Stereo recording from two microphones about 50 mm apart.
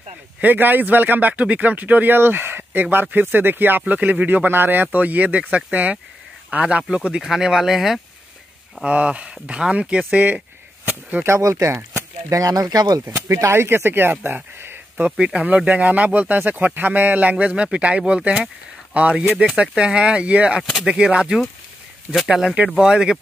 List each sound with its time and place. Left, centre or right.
0.4 s speech: right
2.1 s speech: right
6.6 s speech: centre
8.8 s speech: right
11.2 s speech: right
15.0 s speech: right